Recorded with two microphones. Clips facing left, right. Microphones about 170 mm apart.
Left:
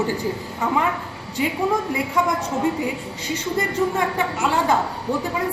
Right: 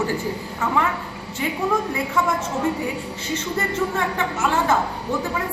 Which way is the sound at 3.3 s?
15° left (ahead or behind).